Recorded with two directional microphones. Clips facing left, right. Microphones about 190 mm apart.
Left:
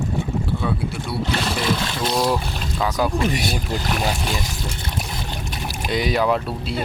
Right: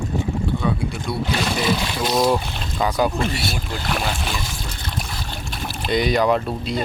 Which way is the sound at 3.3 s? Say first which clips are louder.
Left 3 dB; 15° left (ahead or behind).